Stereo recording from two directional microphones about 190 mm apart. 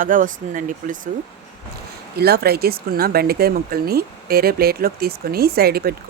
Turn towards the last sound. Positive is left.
turn(degrees=-55)  # may be behind; listen again after turning